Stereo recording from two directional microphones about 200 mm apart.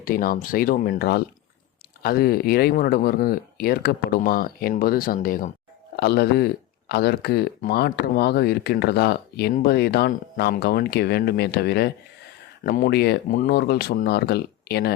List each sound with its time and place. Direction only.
0.0 s speech: 45° left (ahead or behind)